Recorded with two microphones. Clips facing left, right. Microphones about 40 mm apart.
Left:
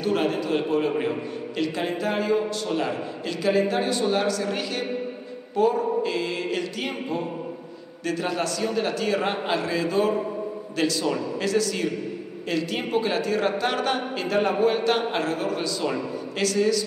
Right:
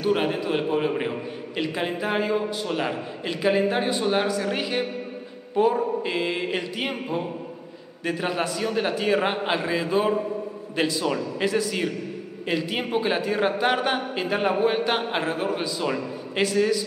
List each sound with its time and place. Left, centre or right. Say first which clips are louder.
0.0 s a man's voice: right 1 dB; centre